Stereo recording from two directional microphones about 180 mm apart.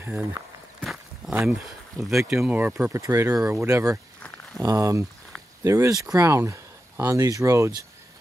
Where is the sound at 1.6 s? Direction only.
Centre (ahead or behind); by 3.9 s 15° right (ahead or behind).